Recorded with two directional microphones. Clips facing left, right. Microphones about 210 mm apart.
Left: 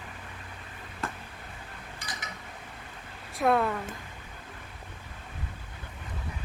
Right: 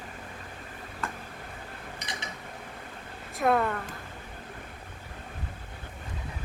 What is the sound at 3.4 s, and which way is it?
Speech, centre (ahead or behind).